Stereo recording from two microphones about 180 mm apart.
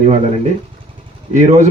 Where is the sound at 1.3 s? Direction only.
40° right (ahead or behind).